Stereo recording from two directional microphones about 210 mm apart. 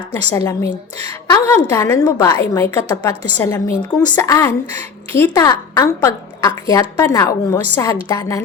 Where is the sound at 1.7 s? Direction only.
15° left (ahead or behind).